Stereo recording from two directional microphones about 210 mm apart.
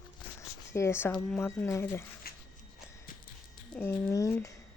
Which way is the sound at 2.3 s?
45° left (ahead or behind).